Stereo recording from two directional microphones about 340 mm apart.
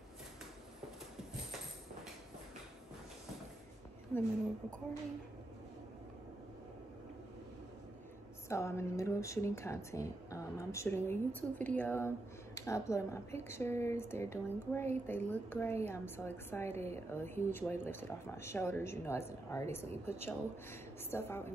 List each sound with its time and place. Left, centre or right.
8.5 s a woman's voice: centre